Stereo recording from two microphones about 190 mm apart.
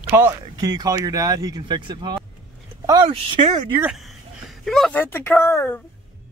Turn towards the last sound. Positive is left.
turn(degrees=15)  # may be behind; listen again after turning